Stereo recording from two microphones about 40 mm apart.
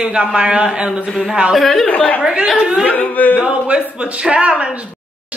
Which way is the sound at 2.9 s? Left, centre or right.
Left.